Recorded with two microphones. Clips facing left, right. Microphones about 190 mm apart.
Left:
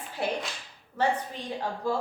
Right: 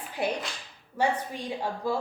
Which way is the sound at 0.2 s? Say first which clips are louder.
Right 1 dB; 15° right (ahead or behind).